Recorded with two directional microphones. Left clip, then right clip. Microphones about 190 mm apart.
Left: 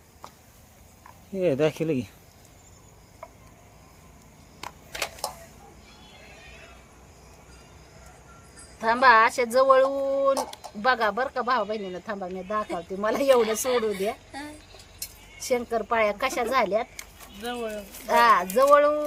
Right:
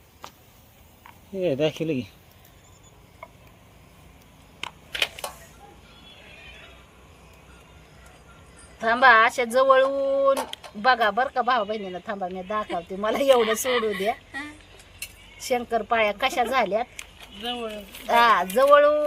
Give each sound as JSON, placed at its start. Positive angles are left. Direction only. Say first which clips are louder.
{"t": 0.2, "sound": "a sound", "louder": "right 2 dB", "side_deg": -20}
{"t": 1.4, "sound": "speech", "louder": "even", "side_deg": 10}
{"t": 8.8, "sound": "speech", "louder": "right 1 dB", "side_deg": 0}
{"t": 15.4, "sound": "speech", "louder": "right 2 dB", "side_deg": 0}
{"t": 18.1, "sound": "speech", "louder": "right 1 dB", "side_deg": -5}